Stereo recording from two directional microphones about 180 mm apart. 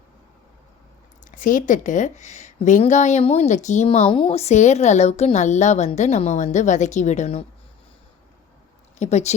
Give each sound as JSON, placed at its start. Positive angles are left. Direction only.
{"t": 1.4, "sound": "a woman's voice", "side_deg": 45}
{"t": 9.0, "sound": "speech", "side_deg": 40}